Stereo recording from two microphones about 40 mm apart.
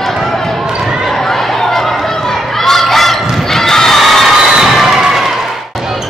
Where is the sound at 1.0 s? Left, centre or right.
Centre.